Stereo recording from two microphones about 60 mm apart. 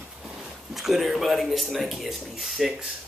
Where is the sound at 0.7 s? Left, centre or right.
Centre.